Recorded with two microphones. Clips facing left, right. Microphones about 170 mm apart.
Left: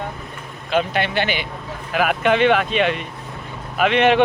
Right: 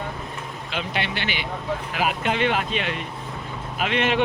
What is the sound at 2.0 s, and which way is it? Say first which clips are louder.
Speech: left 8 dB; 60° left (ahead or behind).